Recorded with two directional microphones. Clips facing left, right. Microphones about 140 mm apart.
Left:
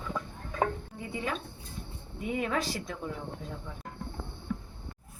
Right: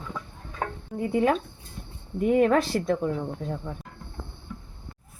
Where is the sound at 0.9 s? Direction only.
55° right (ahead or behind).